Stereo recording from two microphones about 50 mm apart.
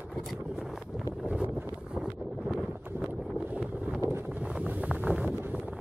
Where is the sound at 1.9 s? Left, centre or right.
Centre.